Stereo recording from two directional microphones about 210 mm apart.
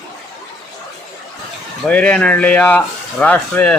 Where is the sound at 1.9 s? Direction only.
5° left (ahead or behind).